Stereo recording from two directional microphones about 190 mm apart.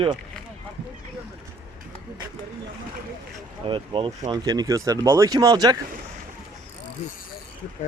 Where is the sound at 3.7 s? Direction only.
25° right (ahead or behind).